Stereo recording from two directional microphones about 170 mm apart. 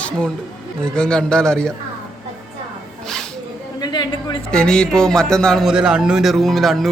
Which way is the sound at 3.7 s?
25° left (ahead or behind).